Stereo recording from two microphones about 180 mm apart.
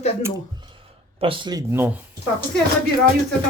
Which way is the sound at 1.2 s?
30° right (ahead or behind).